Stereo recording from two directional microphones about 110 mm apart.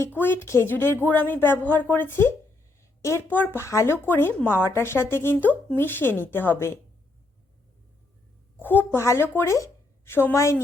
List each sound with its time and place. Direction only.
0.0 s a woman's voice: 20° left (ahead or behind)
8.5 s speech: 15° left (ahead or behind)